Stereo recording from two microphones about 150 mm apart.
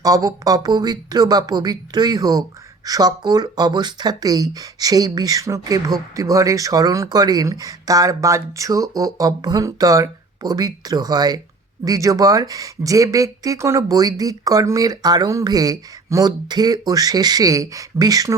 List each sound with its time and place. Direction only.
0.0 s speech: 25° right (ahead or behind)